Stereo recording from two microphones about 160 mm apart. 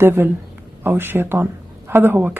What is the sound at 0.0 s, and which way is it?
Speech, 15° right (ahead or behind).